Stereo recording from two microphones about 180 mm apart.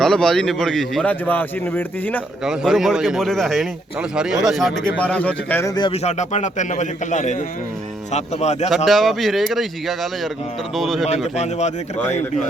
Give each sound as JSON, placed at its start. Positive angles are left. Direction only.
{"t": 0.0, "sound": "a man's voice", "side_deg": 5}
{"t": 2.4, "sound": "a man's voice", "side_deg": -5}
{"t": 5.7, "sound": "a man's voice", "side_deg": 30}
{"t": 8.7, "sound": "a man's voice", "side_deg": 0}
{"t": 11.3, "sound": "a man's voice", "side_deg": 40}